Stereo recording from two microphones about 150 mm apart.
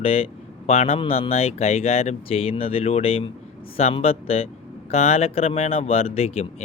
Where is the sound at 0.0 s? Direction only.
40° left (ahead or behind).